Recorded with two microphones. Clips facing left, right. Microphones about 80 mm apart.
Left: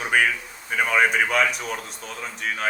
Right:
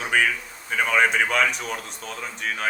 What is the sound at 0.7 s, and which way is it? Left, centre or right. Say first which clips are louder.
Speech: even; centre.